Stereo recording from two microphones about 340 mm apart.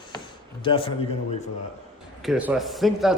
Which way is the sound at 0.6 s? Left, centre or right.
Centre.